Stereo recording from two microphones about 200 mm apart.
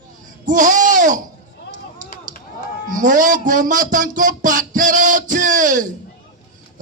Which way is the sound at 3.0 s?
40° right (ahead or behind).